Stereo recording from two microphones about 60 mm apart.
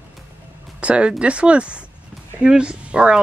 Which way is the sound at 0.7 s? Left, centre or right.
Centre.